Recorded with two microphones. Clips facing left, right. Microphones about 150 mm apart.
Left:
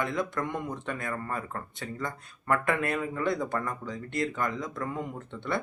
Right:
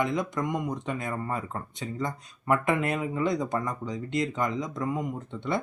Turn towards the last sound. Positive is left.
turn(degrees=-15)  # may be behind; listen again after turning